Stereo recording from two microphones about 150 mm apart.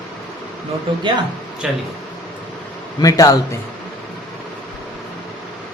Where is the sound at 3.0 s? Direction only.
25° left (ahead or behind).